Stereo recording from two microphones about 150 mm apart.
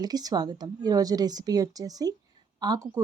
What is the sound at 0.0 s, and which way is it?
Speech, 25° right (ahead or behind).